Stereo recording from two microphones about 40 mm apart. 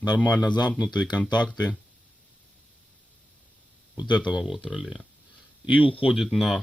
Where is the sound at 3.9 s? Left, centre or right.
Right.